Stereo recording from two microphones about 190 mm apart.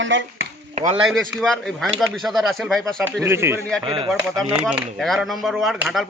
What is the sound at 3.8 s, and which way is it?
Speech, 30° right (ahead or behind).